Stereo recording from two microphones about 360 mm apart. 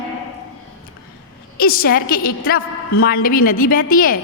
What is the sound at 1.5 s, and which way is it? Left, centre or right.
A woman's voice, left.